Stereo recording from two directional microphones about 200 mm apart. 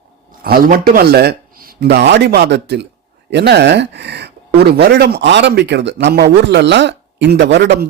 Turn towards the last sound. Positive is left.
turn(degrees=-60)  # may be behind; listen again after turning